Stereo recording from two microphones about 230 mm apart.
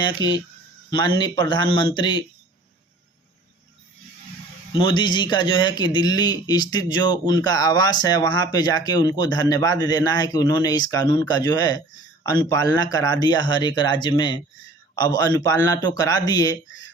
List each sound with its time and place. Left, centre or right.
0.0 s speech: centre
4.8 s a man's voice: centre